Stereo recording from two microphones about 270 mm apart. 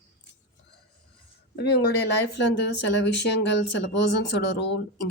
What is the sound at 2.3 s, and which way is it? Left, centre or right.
Speech, left.